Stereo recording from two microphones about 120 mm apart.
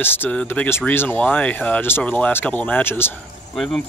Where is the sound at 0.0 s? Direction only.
15° left (ahead or behind).